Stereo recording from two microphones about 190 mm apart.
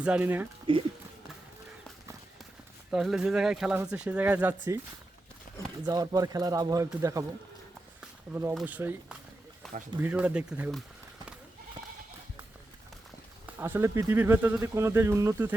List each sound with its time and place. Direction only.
0.0 s speech: 5° right (ahead or behind)
0.7 s speech: 25° right (ahead or behind)
2.9 s speech: 5° right (ahead or behind)
5.8 s speech: 20° right (ahead or behind)
8.3 s speech: 15° right (ahead or behind)
9.6 s a sound: centre (ahead or behind)
10.0 s speech: 5° right (ahead or behind)
13.6 s speech: 15° right (ahead or behind)